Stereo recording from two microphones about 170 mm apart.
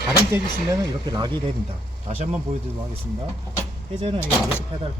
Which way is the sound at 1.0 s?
25° right (ahead or behind).